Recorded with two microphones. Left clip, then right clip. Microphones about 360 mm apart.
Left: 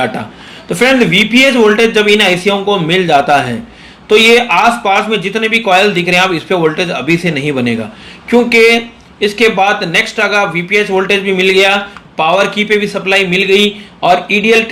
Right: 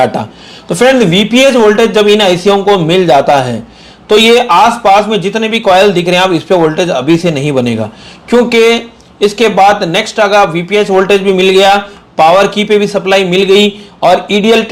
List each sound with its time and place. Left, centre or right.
0.7 s speech: right